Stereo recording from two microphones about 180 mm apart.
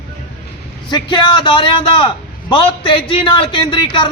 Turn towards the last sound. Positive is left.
turn(degrees=25)  # may be behind; listen again after turning